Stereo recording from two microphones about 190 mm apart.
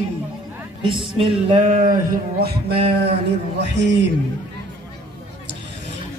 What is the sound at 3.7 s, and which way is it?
Speech, 70° right (ahead or behind).